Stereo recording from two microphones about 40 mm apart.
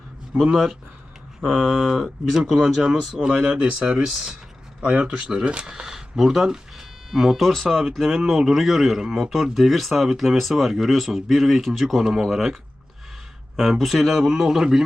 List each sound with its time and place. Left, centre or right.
1.4 s speech: centre
3.2 s speech: right
5.1 s a man's voice: centre
5.5 s speech: right
5.8 s speech: centre
8.2 s a man's voice: centre
10.7 s a man's voice: centre
13.6 s speech: centre